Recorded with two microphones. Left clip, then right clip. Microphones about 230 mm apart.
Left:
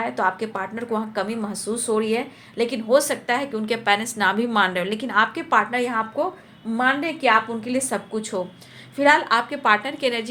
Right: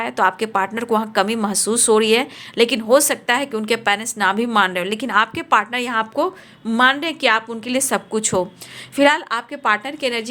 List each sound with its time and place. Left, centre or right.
0.0 s speech: right